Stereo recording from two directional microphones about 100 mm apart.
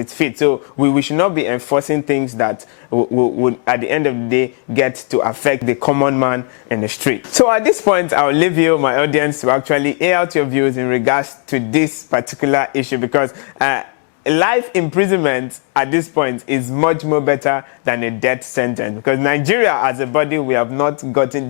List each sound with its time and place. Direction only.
0.2 s speech: 15° left (ahead or behind)